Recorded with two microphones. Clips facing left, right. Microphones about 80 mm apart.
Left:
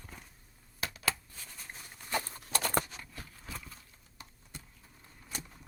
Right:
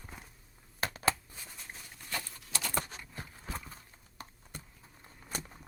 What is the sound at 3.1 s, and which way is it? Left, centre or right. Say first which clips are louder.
Clip-clop: right 6 dB; right.